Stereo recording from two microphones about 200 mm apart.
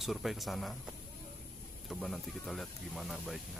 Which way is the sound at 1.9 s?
Centre (ahead or behind).